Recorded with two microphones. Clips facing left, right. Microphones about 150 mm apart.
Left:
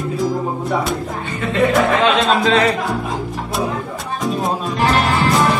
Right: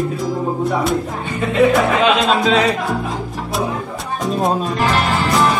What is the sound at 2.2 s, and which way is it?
Music, centre (ahead or behind).